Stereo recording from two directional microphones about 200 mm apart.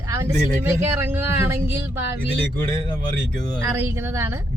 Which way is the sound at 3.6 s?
10° right (ahead or behind).